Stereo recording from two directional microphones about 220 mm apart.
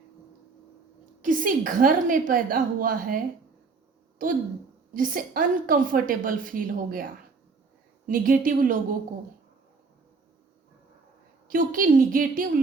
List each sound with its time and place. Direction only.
1.2 s a woman's voice: 35° right (ahead or behind)
4.2 s a woman's voice: 40° right (ahead or behind)
11.4 s a woman's voice: 40° right (ahead or behind)